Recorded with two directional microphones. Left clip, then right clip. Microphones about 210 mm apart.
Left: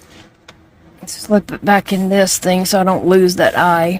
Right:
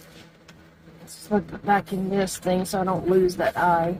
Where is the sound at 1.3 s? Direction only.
55° left (ahead or behind).